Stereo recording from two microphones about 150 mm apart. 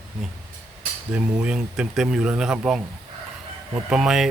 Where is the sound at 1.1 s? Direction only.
5° right (ahead or behind).